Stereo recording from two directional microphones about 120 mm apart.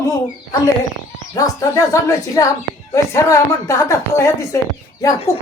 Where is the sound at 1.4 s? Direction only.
25° left (ahead or behind).